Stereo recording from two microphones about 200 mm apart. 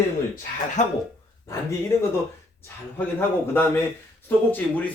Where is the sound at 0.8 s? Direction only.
35° left (ahead or behind).